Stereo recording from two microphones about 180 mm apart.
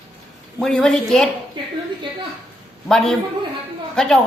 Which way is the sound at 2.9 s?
5° left (ahead or behind).